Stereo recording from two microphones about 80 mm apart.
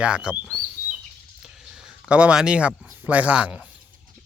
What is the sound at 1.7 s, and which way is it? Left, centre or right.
Speech, centre.